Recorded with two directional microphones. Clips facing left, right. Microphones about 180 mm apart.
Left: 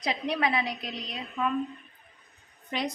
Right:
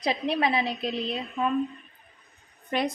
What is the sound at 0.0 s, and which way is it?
A woman's voice, 30° right (ahead or behind).